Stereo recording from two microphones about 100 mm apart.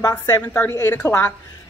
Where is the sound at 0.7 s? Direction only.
30° left (ahead or behind).